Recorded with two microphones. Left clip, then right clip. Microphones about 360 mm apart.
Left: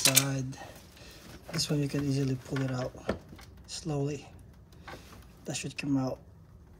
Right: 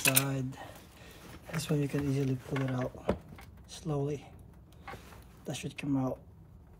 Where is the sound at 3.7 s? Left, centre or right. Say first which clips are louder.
Left 1 dB; centre.